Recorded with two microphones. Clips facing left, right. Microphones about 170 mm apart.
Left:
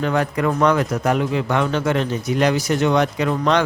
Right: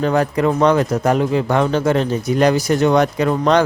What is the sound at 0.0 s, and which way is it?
A man's voice, 35° right (ahead or behind).